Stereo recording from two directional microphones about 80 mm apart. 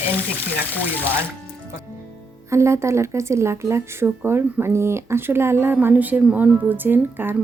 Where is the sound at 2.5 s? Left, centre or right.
Right.